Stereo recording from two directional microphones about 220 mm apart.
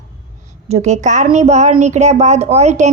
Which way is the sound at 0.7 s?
30° right (ahead or behind).